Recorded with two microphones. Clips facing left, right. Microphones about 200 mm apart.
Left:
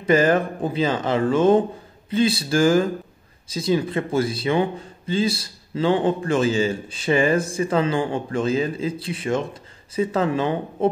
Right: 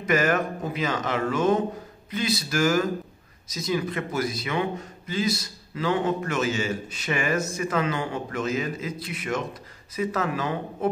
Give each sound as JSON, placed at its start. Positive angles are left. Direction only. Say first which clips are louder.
{"t": 0.0, "sound": "a man's voice", "louder": "left 5 dB", "side_deg": 30}